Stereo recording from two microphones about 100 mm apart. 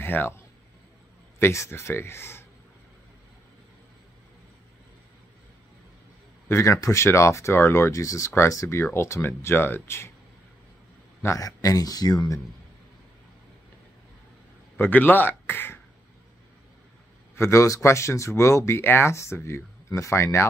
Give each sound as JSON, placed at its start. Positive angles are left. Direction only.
{"t": 0.0, "sound": "speech", "side_deg": 20}
{"t": 1.4, "sound": "speech", "side_deg": 25}
{"t": 6.5, "sound": "speech", "side_deg": 30}
{"t": 11.2, "sound": "speech", "side_deg": 35}
{"t": 14.8, "sound": "speech", "side_deg": 20}
{"t": 17.4, "sound": "speech", "side_deg": 30}